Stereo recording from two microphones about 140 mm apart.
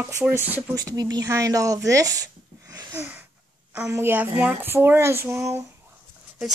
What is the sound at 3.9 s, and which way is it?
Speech, 15° right (ahead or behind).